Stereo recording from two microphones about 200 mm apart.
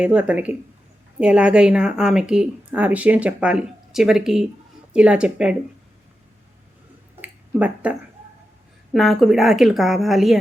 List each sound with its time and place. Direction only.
0.0 s a woman's voice: 5° right (ahead or behind)
7.2 s a sound: 5° right (ahead or behind)
8.9 s a woman's voice: centre (ahead or behind)